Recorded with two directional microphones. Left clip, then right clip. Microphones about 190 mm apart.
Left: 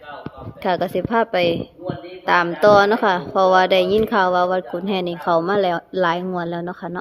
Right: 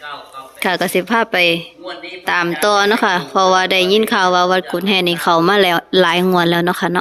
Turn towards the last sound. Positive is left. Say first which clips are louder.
# right 12 dB
turn(degrees=-15)  # may be behind; listen again after turning